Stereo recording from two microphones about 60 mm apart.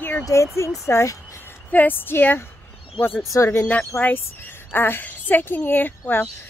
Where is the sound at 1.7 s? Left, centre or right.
Left.